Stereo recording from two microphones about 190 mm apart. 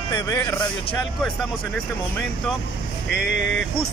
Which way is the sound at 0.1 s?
15° left (ahead or behind).